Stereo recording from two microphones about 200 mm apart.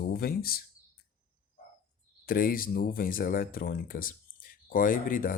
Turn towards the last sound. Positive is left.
turn(degrees=45)  # may be behind; listen again after turning